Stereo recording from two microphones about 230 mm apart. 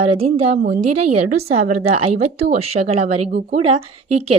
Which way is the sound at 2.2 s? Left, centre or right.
Right.